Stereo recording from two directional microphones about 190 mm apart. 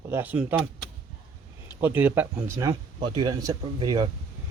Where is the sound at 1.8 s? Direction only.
10° right (ahead or behind).